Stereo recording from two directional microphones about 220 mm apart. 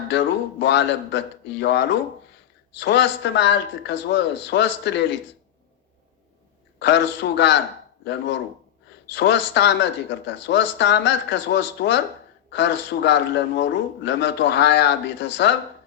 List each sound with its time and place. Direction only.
0.1 s a man's voice: 50° left (ahead or behind)
6.7 s a man's voice: 55° left (ahead or behind)
9.1 s a man's voice: 55° left (ahead or behind)